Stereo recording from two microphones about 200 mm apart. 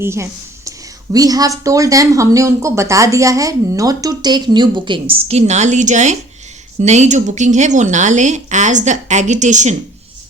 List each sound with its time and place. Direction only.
0.0 s a woman's voice: 15° right (ahead or behind); by 9.7 s 35° right (ahead or behind)